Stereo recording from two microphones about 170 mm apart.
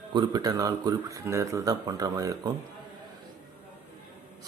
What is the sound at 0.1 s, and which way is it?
Speech, 25° right (ahead or behind).